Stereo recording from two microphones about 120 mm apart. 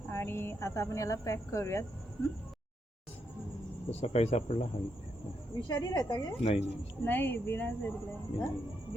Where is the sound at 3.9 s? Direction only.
65° left (ahead or behind).